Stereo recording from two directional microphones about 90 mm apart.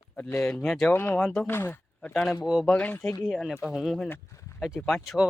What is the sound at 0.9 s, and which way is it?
Speech, 20° left (ahead or behind).